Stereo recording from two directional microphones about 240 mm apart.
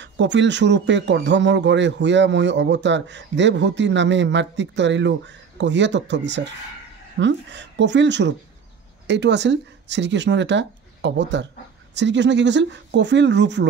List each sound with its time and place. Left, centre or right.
0.0 s speech: right